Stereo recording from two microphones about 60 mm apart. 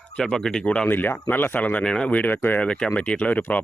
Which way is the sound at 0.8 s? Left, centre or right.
Left.